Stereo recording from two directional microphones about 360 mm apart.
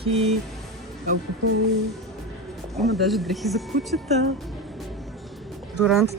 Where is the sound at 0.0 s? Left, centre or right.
Centre.